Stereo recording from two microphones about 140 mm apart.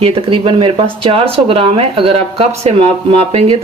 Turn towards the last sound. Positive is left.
turn(degrees=-45)  # may be behind; listen again after turning